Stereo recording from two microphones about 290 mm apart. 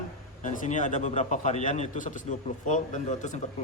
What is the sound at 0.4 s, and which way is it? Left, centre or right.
A man's voice, left.